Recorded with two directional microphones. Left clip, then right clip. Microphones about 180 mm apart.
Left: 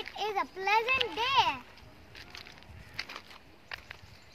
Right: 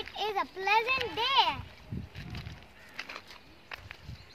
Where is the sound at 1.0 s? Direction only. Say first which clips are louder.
Right 1 dB; 10° right (ahead or behind).